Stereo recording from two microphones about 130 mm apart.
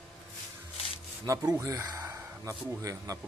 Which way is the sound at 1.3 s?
25° right (ahead or behind).